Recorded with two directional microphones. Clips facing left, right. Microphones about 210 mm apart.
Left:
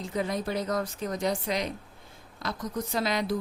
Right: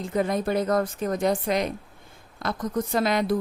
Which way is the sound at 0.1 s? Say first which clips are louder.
Right 6 dB; 55° right (ahead or behind).